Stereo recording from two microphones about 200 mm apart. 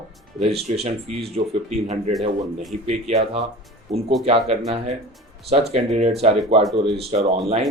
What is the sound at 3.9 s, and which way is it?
Speech, 35° right (ahead or behind).